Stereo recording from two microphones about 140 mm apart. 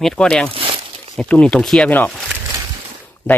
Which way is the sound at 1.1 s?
5° left (ahead or behind).